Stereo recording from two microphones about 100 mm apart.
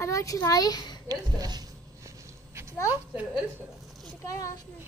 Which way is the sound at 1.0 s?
40° right (ahead or behind).